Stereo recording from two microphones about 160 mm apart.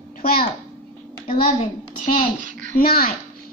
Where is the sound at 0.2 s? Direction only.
70° left (ahead or behind).